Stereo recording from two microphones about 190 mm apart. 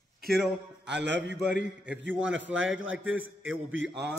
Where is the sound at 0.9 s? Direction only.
70° right (ahead or behind).